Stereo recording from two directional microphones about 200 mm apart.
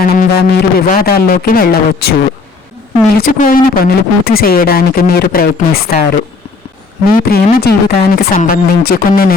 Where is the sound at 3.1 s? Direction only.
45° left (ahead or behind).